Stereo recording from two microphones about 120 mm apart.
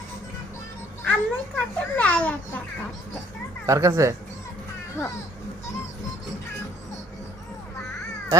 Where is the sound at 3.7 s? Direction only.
25° right (ahead or behind).